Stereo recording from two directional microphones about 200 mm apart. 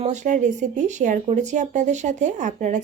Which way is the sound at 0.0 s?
35° right (ahead or behind).